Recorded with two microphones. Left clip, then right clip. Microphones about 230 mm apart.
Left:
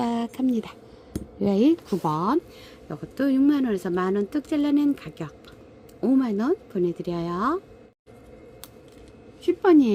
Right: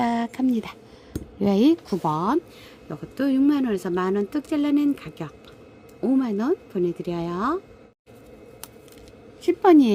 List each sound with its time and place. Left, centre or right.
0.0 s a sound: centre
2.9 s speech: centre
9.4 s a woman's voice: centre